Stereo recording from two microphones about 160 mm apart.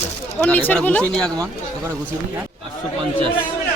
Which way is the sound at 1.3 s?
15° right (ahead or behind).